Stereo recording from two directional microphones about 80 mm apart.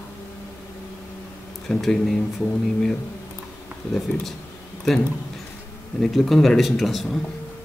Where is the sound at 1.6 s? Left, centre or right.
Centre.